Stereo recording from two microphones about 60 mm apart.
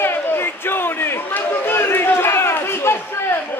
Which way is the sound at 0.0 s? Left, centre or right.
Left.